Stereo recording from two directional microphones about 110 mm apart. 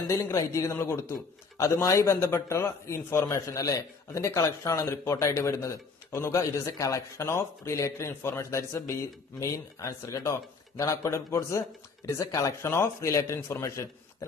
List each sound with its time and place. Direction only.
0.2 s a man's voice: 30° left (ahead or behind)